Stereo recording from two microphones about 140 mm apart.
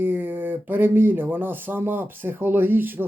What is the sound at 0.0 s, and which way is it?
Speech, 15° right (ahead or behind).